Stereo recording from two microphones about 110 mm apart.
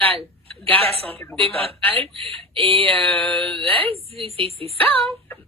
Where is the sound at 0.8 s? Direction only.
60° right (ahead or behind).